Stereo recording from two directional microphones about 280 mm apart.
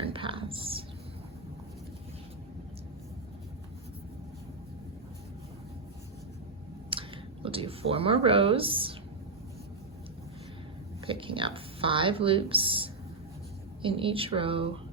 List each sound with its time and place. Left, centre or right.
0.0 s whispering: centre
6.9 s speech: centre
11.0 s speech: centre